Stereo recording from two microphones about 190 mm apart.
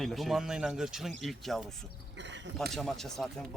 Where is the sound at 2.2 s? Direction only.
70° right (ahead or behind).